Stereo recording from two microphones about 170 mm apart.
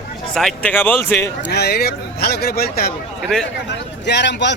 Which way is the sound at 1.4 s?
75° left (ahead or behind).